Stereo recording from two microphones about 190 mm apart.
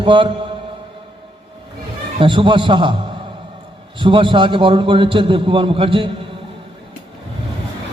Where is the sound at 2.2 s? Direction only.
25° right (ahead or behind).